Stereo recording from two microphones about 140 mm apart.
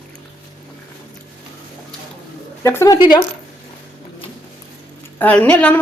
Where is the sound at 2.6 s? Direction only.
20° left (ahead or behind).